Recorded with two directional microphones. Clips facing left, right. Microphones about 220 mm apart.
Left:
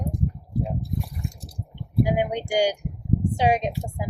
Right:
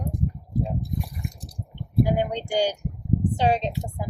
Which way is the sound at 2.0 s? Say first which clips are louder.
Left 1 dB; 10° left (ahead or behind).